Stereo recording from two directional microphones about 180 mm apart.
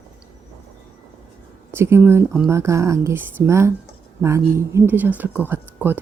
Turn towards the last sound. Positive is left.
turn(degrees=-10)  # may be behind; listen again after turning